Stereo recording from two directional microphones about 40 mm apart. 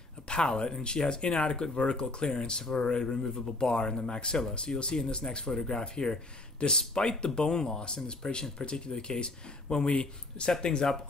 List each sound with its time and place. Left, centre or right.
0.3 s speech: left